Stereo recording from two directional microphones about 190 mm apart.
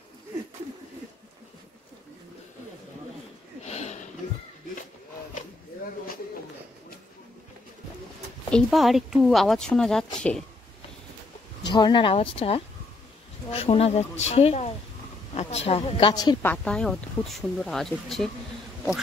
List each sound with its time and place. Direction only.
3.6 s a sound: 35° left (ahead or behind)
8.5 s speech: centre (ahead or behind)
11.6 s a woman's voice: 25° left (ahead or behind)
16.4 s speech: 5° left (ahead or behind)